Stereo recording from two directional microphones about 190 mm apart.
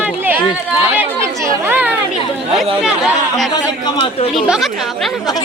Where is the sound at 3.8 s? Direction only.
30° left (ahead or behind).